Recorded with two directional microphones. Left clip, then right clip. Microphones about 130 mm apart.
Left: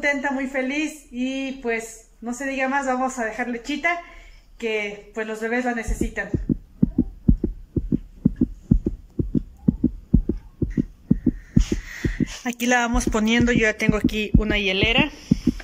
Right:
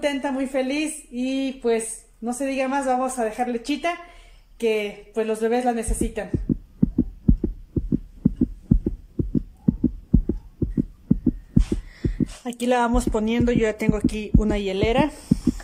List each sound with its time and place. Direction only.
0.0 s speech: 20° right (ahead or behind)
6.8 s heart sounds: centre (ahead or behind)
11.9 s speech: 10° right (ahead or behind)
14.4 s speech: 30° right (ahead or behind)